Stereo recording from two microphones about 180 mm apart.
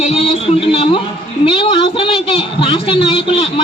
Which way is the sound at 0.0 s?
35° left (ahead or behind).